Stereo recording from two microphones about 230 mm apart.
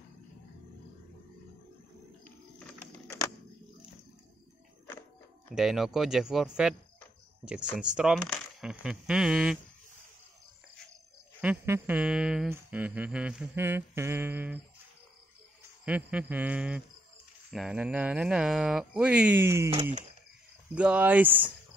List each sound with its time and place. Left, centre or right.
5.5 s speech: centre
11.4 s humming: centre
15.8 s speech: centre
19.4 s humming: centre
19.7 s speech: right
20.7 s humming: centre